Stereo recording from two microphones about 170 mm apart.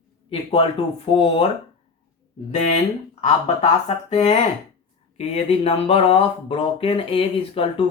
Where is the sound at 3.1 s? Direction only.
35° left (ahead or behind).